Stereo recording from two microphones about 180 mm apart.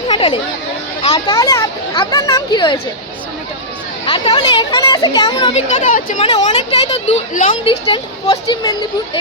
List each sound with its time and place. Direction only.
0.1 s chatter: 30° left (ahead or behind)
1.0 s speech: 25° left (ahead or behind)
4.0 s speech: 30° left (ahead or behind)
5.5 s speech: 40° left (ahead or behind)
6.2 s speech: 30° left (ahead or behind)
7.6 s speech: 30° left (ahead or behind)